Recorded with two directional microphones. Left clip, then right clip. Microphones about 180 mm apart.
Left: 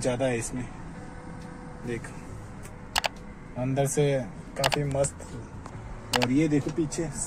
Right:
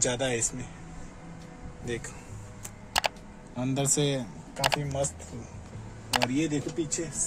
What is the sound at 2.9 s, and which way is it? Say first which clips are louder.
Computer keyboard: even; centre (ahead or behind).